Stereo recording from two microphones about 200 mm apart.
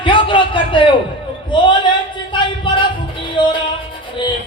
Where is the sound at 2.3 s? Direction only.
25° left (ahead or behind).